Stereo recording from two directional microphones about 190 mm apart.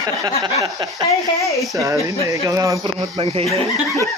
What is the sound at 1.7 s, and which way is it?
Speech, 15° right (ahead or behind).